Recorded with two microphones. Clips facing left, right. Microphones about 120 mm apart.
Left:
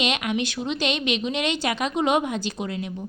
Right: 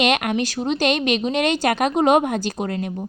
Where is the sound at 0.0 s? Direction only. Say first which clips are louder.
Right 5 dB; 55° right (ahead or behind).